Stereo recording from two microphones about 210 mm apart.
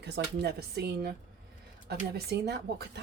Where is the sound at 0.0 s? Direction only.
55° right (ahead or behind).